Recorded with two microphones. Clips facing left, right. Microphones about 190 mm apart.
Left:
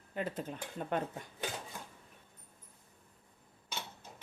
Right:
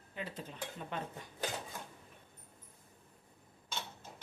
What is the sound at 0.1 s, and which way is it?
Dishes, 50° left (ahead or behind).